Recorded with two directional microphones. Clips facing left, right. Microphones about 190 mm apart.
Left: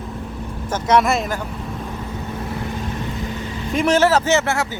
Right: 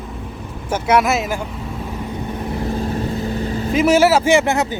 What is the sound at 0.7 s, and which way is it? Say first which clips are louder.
Speech: right 1 dB; 5° right (ahead or behind).